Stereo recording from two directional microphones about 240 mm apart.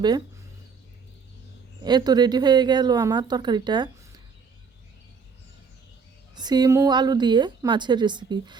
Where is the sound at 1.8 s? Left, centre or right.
Centre.